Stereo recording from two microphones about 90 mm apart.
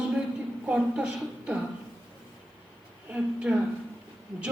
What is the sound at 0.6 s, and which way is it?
Speech, 10° right (ahead or behind).